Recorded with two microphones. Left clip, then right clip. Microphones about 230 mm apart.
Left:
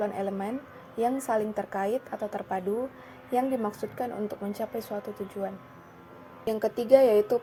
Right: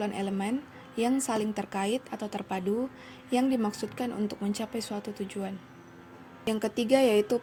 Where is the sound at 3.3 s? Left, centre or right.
Right.